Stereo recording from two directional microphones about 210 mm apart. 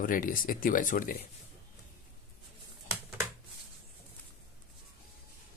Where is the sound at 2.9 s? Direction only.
15° right (ahead or behind).